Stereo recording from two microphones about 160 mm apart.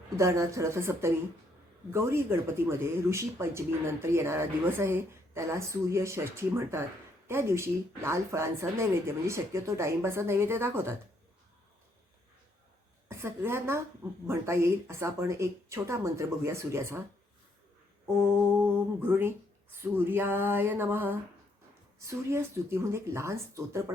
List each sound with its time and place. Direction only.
0.2 s speech: 20° right (ahead or behind)
13.1 s a woman's voice: 15° right (ahead or behind)
18.6 s speech: 15° right (ahead or behind)